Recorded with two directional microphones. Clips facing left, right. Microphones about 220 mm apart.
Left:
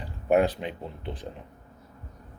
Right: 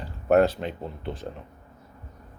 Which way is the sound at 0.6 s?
45° right (ahead or behind).